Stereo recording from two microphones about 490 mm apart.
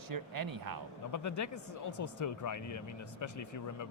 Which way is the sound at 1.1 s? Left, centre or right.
Left.